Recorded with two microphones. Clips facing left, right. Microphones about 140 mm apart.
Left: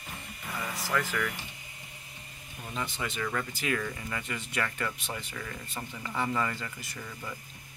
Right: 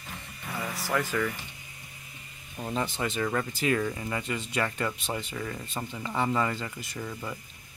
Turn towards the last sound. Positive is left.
turn(degrees=-25)  # may be behind; listen again after turning